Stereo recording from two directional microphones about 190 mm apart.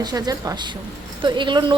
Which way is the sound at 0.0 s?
20° right (ahead or behind).